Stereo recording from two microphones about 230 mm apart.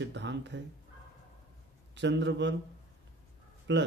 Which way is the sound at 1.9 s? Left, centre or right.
Right.